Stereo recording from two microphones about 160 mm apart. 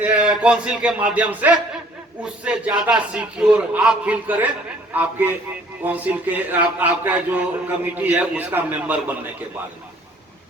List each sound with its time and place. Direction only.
0.0 s a man's voice: 5° right (ahead or behind)